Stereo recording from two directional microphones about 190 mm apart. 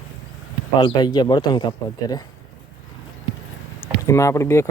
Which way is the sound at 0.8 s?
25° left (ahead or behind).